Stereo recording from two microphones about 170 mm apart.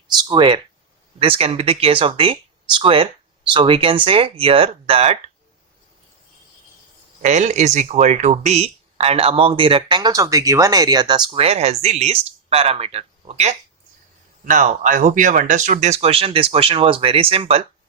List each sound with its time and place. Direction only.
0.2 s speech: 30° right (ahead or behind)
7.2 s speech: 45° right (ahead or behind)